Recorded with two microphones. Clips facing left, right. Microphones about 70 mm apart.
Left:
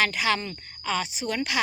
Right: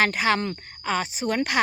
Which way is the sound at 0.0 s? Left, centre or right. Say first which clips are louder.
Right 3 dB; right.